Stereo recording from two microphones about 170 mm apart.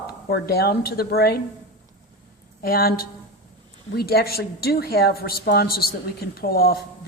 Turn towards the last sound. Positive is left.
turn(degrees=60)  # may be behind; listen again after turning